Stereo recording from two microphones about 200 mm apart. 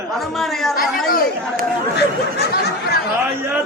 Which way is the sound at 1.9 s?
55° left (ahead or behind).